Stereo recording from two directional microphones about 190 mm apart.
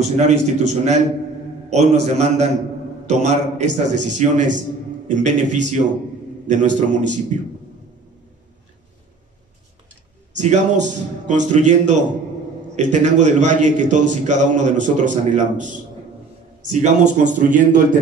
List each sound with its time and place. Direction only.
0.0 s a man's voice: 35° right (ahead or behind)
10.3 s a man's voice: 40° right (ahead or behind)